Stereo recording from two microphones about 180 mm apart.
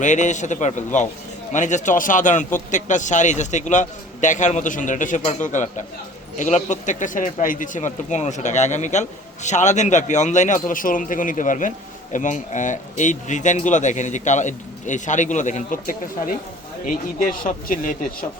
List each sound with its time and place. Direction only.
0.0 s speech: 45° left (ahead or behind)